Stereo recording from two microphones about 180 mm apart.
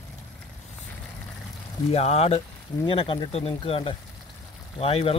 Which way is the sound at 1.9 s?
35° left (ahead or behind).